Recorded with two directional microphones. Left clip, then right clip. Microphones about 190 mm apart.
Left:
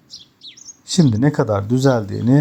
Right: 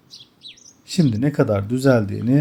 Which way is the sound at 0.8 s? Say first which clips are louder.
Left 4 dB; 20° left (ahead or behind).